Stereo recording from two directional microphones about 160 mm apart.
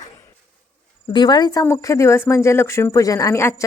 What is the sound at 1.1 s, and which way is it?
Speech, 25° left (ahead or behind).